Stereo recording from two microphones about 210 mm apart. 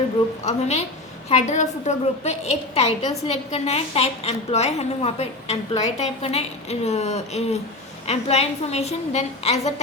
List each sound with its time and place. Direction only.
0.4 s a woman's voice: 30° left (ahead or behind)